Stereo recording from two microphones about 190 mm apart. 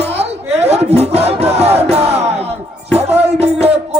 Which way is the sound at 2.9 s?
35° right (ahead or behind).